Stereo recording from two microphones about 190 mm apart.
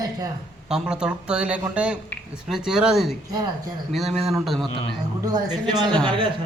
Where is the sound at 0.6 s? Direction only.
5° right (ahead or behind).